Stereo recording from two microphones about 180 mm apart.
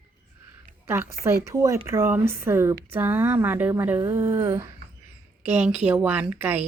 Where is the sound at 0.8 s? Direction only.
15° right (ahead or behind).